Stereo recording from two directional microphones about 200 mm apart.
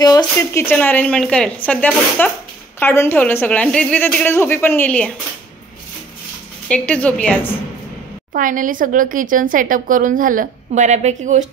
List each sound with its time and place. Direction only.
0.2 s a woman's voice: 10° left (ahead or behind)
6.7 s a woman's voice: 5° left (ahead or behind)
8.3 s a woman's voice: 40° right (ahead or behind)